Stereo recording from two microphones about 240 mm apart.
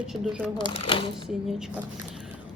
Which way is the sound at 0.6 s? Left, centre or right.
Left.